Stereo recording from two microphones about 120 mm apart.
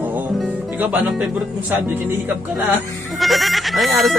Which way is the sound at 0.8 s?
15° right (ahead or behind).